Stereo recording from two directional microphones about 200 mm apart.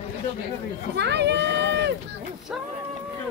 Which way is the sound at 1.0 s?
60° right (ahead or behind).